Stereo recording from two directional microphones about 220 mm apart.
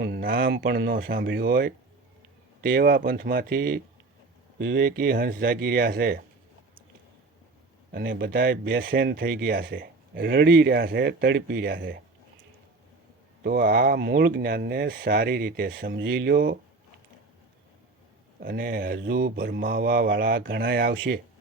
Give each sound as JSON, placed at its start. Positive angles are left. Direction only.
{"t": 0.0, "sound": "speech", "side_deg": -45}
{"t": 2.7, "sound": "speech", "side_deg": -45}
{"t": 7.9, "sound": "speech", "side_deg": -40}
{"t": 13.4, "sound": "speech", "side_deg": -40}
{"t": 18.3, "sound": "speech", "side_deg": -40}